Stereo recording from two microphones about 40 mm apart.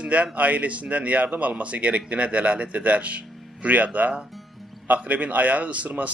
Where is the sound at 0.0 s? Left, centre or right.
Right.